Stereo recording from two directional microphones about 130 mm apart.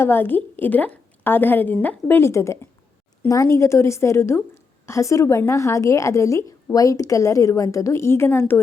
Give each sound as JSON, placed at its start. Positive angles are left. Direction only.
{"t": 0.0, "sound": "a woman's voice", "side_deg": 15}